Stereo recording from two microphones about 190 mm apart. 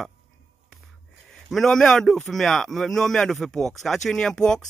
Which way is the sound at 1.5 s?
Centre (ahead or behind).